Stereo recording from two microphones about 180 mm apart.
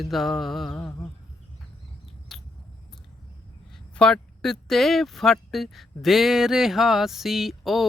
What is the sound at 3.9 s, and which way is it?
Music, 5° left (ahead or behind).